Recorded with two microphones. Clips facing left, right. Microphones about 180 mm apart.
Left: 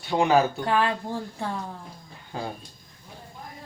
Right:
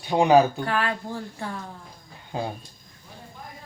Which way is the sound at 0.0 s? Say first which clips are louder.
Right 3 dB; 15° right (ahead or behind).